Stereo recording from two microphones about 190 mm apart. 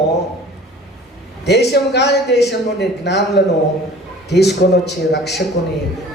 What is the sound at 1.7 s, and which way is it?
A woman's voice, 60° left (ahead or behind).